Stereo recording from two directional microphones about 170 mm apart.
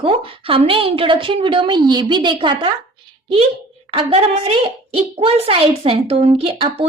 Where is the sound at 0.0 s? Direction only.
30° right (ahead or behind).